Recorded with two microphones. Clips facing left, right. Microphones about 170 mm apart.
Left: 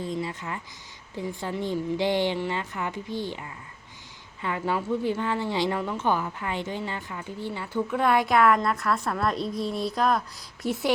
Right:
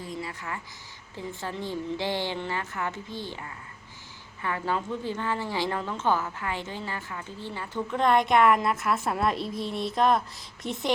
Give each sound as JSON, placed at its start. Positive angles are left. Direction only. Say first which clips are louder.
{"t": 0.0, "sound": "a woman's voice", "louder": "left 5 dB", "side_deg": 25}